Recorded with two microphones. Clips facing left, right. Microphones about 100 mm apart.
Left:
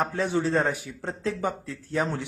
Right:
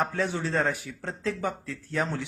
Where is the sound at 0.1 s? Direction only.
15° left (ahead or behind).